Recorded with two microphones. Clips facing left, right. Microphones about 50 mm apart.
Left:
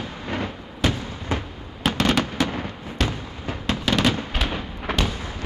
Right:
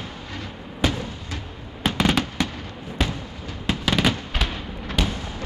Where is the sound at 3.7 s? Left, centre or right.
Centre.